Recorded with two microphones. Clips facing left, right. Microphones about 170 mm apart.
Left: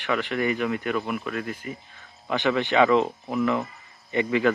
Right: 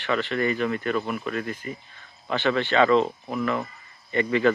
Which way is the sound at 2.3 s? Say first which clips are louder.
Even; 15° left (ahead or behind).